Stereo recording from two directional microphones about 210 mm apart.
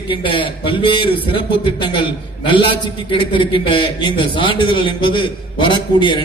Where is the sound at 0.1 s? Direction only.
25° left (ahead or behind).